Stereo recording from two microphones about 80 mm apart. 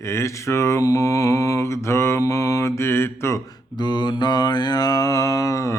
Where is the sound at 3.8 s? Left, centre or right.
Left.